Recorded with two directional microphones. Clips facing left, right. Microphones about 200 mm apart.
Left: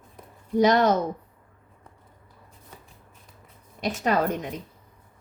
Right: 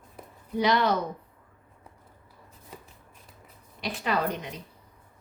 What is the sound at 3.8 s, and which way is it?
Speech, 45° left (ahead or behind).